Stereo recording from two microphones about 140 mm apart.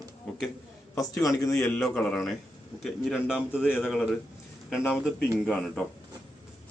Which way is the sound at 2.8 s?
Centre (ahead or behind).